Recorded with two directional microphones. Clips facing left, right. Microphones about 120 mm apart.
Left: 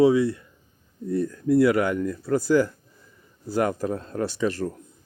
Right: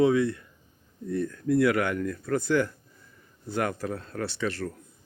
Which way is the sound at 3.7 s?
15° left (ahead or behind).